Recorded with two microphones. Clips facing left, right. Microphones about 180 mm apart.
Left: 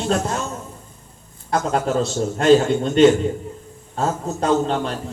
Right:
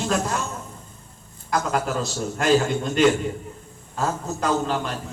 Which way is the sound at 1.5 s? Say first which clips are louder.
Left 4 dB; 35° left (ahead or behind).